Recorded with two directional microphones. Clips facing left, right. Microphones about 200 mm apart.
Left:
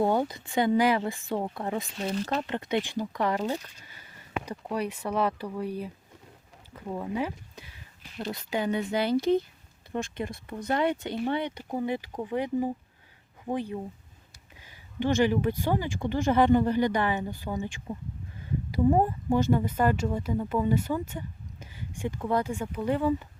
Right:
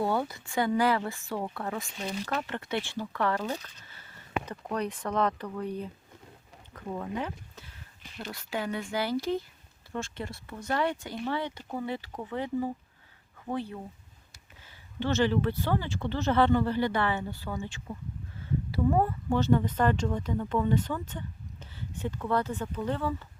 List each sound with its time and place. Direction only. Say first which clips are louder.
0.0 s speech: left 4 dB; 20° left (ahead or behind)
2.2 s speech: left 3 dB; 30° left (ahead or behind)
2.5 s speech: left 4 dB; 15° left (ahead or behind)